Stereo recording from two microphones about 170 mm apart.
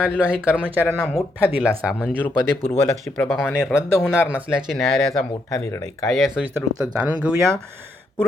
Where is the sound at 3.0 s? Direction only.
Centre (ahead or behind).